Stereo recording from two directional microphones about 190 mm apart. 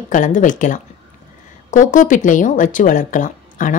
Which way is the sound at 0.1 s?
45° left (ahead or behind).